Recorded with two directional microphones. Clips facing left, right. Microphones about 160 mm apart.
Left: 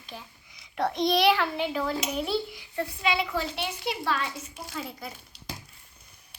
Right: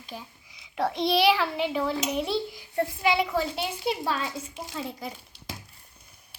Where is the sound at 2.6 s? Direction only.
45° right (ahead or behind).